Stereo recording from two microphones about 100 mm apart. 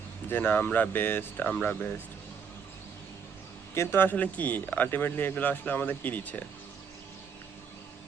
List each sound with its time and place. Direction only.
0.3 s a man's voice: 20° left (ahead or behind)
3.8 s a man's voice: 20° left (ahead or behind)